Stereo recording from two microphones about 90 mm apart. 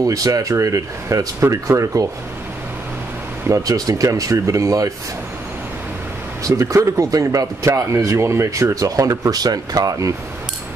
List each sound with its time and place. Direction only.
0.0 s speech: 40° right (ahead or behind)
3.4 s speech: 40° right (ahead or behind)
6.4 s speech: 35° right (ahead or behind)